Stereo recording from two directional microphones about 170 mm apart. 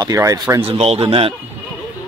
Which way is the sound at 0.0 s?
20° right (ahead or behind).